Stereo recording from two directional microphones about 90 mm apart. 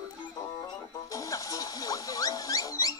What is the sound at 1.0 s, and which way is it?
Music, 40° left (ahead or behind).